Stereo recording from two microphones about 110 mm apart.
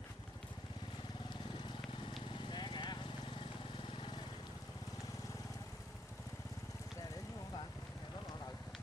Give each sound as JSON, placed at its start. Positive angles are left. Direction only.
{"t": 2.2, "sound": "vehicle", "side_deg": 45}